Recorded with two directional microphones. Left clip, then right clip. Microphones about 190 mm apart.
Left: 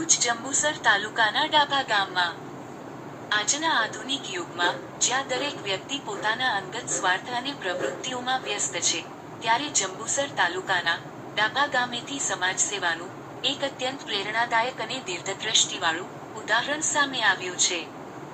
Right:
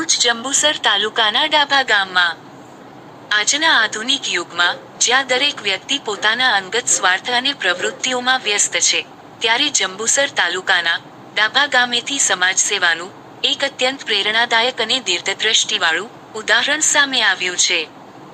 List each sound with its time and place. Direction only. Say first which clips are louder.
0.2 s a woman's voice: right 10 dB; 50° right (ahead or behind)